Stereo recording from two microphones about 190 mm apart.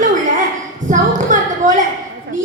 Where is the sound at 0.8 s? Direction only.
40° right (ahead or behind).